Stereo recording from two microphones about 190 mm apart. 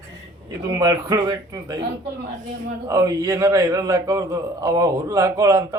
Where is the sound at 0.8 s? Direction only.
20° right (ahead or behind).